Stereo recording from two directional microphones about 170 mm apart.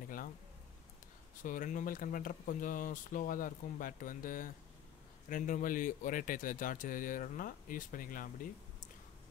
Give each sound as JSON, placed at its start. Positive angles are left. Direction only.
{"t": 1.4, "sound": "speech", "side_deg": 50}